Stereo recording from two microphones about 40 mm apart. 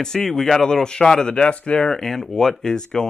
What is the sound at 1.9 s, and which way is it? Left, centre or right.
Speech, centre.